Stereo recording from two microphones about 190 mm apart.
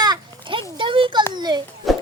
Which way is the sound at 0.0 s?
25° right (ahead or behind).